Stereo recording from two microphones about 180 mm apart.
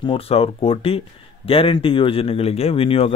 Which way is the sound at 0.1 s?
35° left (ahead or behind).